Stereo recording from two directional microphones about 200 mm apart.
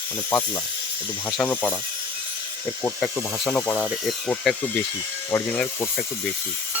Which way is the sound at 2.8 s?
10° left (ahead or behind).